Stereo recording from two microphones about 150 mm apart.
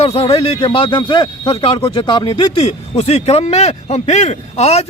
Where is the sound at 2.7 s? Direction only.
45° left (ahead or behind).